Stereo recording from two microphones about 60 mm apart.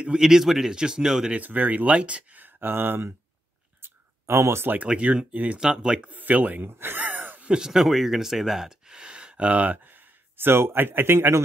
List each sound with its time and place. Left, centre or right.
0.0 s speech: centre
1.3 s speech: right
3.8 s a sound: right
4.8 s speech: right
5.6 s speech: centre
6.0 s speech: right
7.4 s speech: centre
9.8 s speech: right